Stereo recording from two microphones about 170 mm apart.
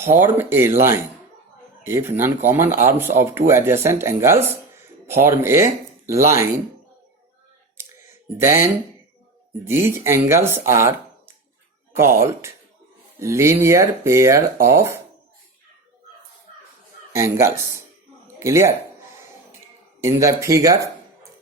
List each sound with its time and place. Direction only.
0.1 s speech: 15° right (ahead or behind)
7.8 s clicking: 15° right (ahead or behind)
9.6 s speech: 15° right (ahead or behind)
17.1 s speech: 15° right (ahead or behind)
20.1 s speech: 20° right (ahead or behind)